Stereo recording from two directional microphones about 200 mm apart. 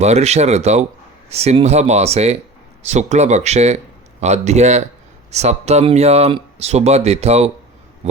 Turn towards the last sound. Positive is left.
turn(degrees=-30)  # may be behind; listen again after turning